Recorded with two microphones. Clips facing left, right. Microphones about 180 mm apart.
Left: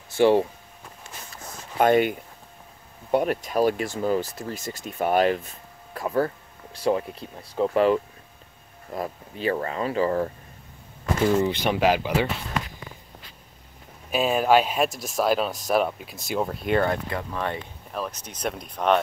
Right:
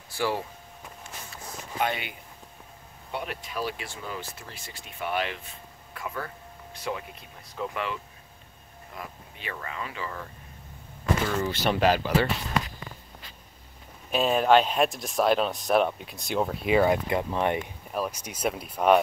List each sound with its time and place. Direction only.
0.1 s speech: 25° left (ahead or behind)
1.3 s a sound: 45° left (ahead or behind)
3.1 s speech: 45° left (ahead or behind)
11.2 s speech: 15° left (ahead or behind)
14.1 s speech: 5° left (ahead or behind)